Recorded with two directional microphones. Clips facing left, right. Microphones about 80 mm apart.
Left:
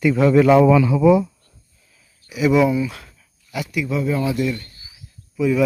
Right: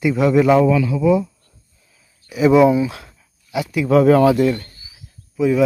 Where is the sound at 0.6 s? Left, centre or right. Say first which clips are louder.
Left 2 dB; left.